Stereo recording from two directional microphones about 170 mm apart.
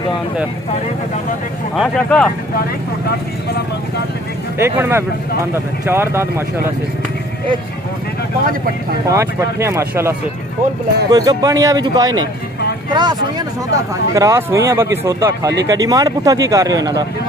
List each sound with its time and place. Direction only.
1.8 s speech: 5° left (ahead or behind)
4.6 s speech: 15° right (ahead or behind)
9.0 s speech: 15° right (ahead or behind)